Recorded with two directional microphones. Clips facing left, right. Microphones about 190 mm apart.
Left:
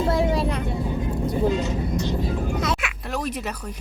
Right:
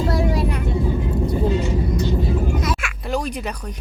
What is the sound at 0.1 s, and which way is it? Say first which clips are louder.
Vehicle: even; 25° left (ahead or behind).